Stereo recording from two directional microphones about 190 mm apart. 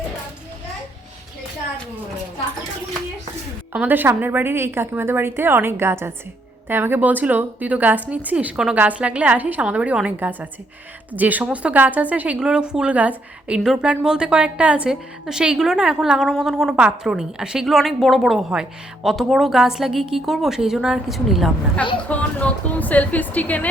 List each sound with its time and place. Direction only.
3.7 s a woman's voice: 10° right (ahead or behind); by 23.6 s 10° left (ahead or behind)